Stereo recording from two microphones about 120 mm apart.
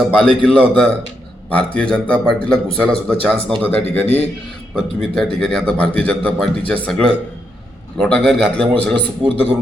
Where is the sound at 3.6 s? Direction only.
15° left (ahead or behind).